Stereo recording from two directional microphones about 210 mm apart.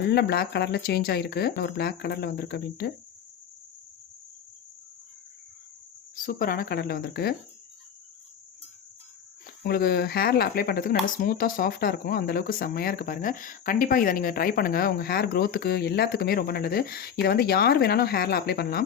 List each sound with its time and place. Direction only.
0.0 s speech: 50° left (ahead or behind)
6.2 s speech: 40° left (ahead or behind)
9.6 s speech: 50° left (ahead or behind)